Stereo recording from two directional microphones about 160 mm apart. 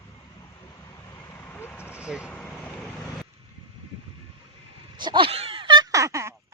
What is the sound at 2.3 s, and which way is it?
Vehicle, 5° left (ahead or behind).